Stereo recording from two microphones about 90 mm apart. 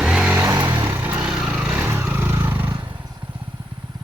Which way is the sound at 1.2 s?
5° right (ahead or behind).